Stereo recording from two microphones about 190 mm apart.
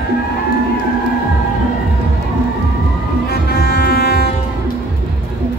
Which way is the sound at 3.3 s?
55° left (ahead or behind).